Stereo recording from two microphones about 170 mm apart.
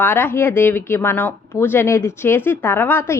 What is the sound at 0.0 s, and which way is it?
Speech, 10° left (ahead or behind).